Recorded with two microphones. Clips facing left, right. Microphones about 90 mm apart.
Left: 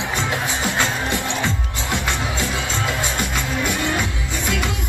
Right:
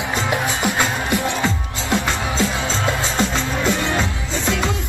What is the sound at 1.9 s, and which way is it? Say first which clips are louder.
Music: right 4 dB; 20° left (ahead or behind).